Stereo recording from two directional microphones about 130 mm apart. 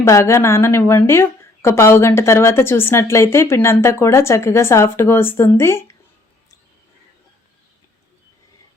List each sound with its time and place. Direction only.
0.0 s a woman's voice: 20° left (ahead or behind)